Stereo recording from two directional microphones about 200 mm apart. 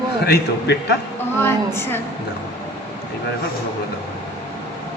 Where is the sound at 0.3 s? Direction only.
55° left (ahead or behind).